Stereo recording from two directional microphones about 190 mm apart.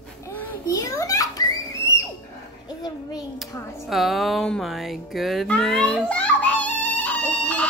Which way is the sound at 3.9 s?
Centre (ahead or behind).